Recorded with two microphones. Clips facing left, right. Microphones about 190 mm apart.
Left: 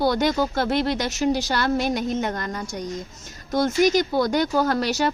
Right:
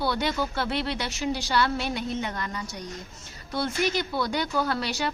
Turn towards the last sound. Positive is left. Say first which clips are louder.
# left 6 dB
turn(degrees=45)  # may be behind; listen again after turning